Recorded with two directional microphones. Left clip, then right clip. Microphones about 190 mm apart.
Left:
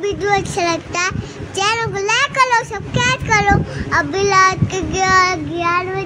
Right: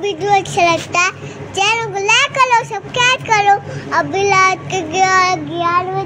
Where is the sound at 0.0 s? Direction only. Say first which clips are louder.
Right 3 dB; 10° left (ahead or behind).